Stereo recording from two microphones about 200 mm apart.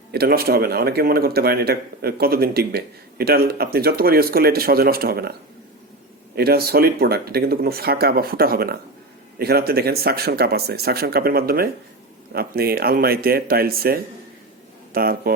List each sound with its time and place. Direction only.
0.1 s speech: 50° right (ahead or behind)